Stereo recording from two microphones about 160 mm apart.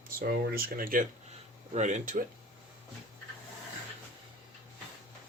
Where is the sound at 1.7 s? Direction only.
50° right (ahead or behind).